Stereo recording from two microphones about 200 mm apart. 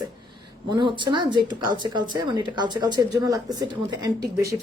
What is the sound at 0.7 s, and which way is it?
Speech, 25° right (ahead or behind).